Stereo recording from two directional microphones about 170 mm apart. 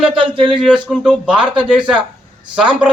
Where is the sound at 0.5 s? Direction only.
5° right (ahead or behind).